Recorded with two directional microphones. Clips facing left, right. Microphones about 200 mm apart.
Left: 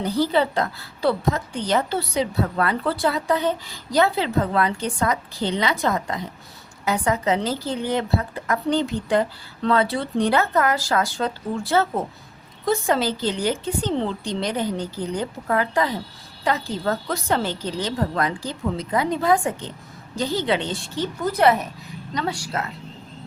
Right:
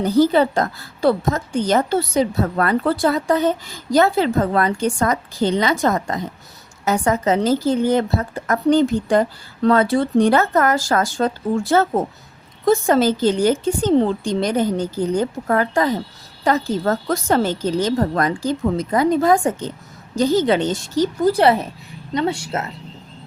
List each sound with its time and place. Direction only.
0.0 s a woman's voice: 45° right (ahead or behind); by 22.7 s 25° right (ahead or behind)